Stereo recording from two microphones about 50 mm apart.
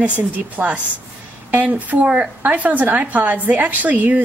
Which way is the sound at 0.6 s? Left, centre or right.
Right.